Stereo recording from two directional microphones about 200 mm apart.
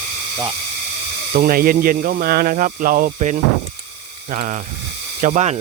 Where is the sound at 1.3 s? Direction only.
45° right (ahead or behind).